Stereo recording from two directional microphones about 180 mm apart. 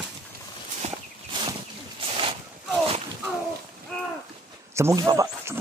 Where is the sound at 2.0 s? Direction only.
30° right (ahead or behind).